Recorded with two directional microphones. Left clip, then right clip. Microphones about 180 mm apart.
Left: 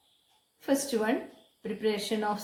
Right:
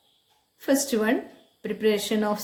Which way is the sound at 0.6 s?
45° right (ahead or behind).